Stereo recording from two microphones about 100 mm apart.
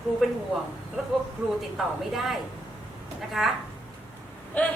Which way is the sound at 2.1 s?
Centre (ahead or behind).